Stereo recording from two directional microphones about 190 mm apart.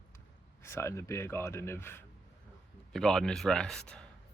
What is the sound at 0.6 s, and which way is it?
A man's voice, 15° left (ahead or behind).